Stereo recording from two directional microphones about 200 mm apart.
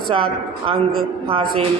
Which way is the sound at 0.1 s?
25° right (ahead or behind).